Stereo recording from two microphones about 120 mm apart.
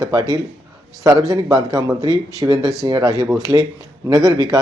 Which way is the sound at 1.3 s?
30° right (ahead or behind).